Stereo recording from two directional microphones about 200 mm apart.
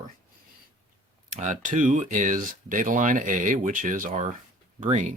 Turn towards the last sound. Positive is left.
turn(degrees=-35)  # may be behind; listen again after turning